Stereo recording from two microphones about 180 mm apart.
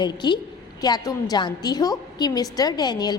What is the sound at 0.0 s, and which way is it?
A woman's voice, 25° left (ahead or behind).